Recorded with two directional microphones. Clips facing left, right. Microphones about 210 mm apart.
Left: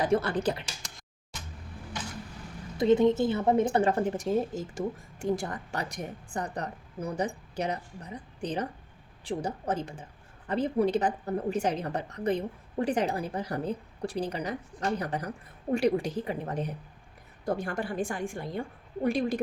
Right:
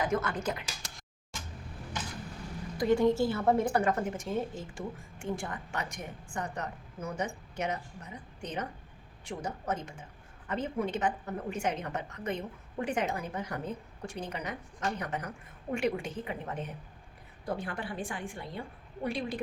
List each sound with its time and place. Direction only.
0.0 s a woman's voice: 35° left (ahead or behind)
2.7 s a woman's voice: 20° left (ahead or behind); by 19.4 s 45° left (ahead or behind)